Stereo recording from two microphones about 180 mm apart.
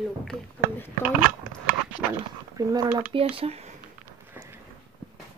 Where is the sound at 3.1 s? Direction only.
30° right (ahead or behind).